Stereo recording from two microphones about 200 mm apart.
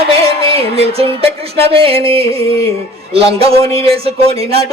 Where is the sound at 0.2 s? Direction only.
30° right (ahead or behind).